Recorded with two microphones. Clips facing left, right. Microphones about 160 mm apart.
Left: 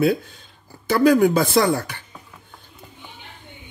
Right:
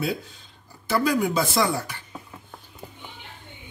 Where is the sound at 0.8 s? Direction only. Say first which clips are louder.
Left 7 dB; 60° left (ahead or behind).